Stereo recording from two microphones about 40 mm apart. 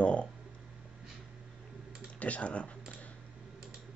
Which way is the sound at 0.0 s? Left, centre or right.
Left.